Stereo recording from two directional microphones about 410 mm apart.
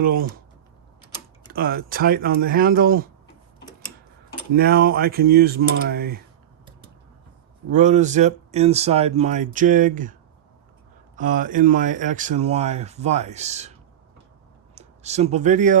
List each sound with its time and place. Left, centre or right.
0.0 s speech: right
1.5 s speech: right
4.5 s speech: right
7.7 s speech: centre
11.2 s speech: centre
14.8 s speech: centre